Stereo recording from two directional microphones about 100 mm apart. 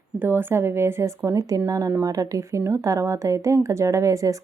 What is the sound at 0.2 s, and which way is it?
A woman's voice, 20° right (ahead or behind).